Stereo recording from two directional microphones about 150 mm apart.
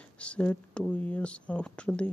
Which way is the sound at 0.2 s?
10° left (ahead or behind).